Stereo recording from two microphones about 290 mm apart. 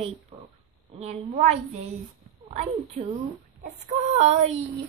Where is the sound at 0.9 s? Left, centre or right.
Right.